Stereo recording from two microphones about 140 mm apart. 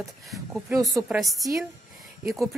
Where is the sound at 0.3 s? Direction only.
Centre (ahead or behind).